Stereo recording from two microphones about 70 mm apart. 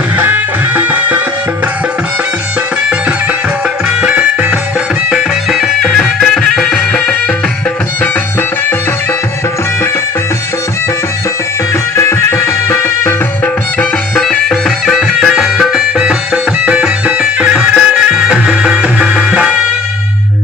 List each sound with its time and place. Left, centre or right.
0.2 s music: right
3.8 s music: centre
5.1 s music: centre
5.8 s music: centre
11.9 s music: left
14.2 s music: centre